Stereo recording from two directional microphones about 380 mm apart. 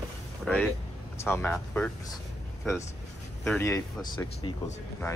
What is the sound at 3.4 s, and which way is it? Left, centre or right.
Speech, centre.